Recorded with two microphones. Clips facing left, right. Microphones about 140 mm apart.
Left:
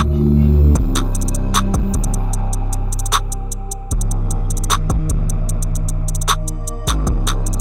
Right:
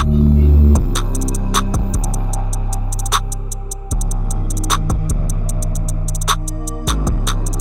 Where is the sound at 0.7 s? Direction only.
Centre (ahead or behind).